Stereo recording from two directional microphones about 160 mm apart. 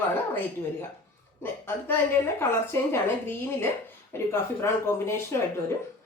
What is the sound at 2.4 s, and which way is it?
A woman's voice, 15° left (ahead or behind).